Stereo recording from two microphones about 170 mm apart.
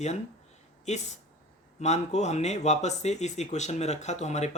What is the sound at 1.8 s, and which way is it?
Speech, 40° left (ahead or behind).